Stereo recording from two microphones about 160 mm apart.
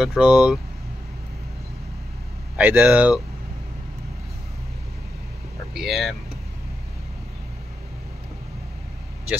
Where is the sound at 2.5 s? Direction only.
10° right (ahead or behind).